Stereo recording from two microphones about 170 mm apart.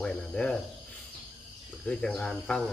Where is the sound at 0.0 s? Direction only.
5° left (ahead or behind).